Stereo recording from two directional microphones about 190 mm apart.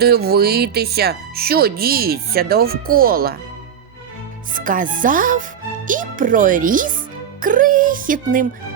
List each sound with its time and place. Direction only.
0.0 s speech: 55° right (ahead or behind)
4.5 s speech: 45° right (ahead or behind)